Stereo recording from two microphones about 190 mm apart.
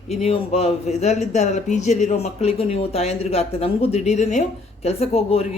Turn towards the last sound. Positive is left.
turn(degrees=30)  # may be behind; listen again after turning